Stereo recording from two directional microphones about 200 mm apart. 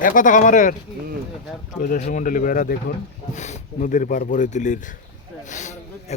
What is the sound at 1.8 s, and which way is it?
Speech, 40° left (ahead or behind).